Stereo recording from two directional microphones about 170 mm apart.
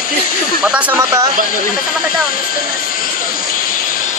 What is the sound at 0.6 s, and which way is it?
Speech, 5° right (ahead or behind).